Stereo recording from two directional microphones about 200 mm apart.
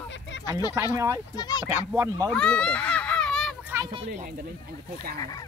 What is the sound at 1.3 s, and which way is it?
Speech, 20° left (ahead or behind).